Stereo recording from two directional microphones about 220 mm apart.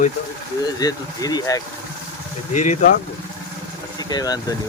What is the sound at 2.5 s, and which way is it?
Speech, 35° left (ahead or behind).